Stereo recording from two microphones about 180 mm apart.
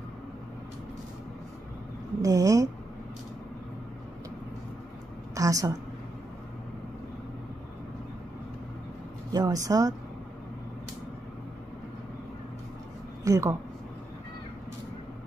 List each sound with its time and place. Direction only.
2.2 s a woman's voice: 20° right (ahead or behind)
5.3 s a sound: 20° right (ahead or behind)
9.3 s a woman's voice: 20° right (ahead or behind)
13.2 s a woman's voice: 15° right (ahead or behind)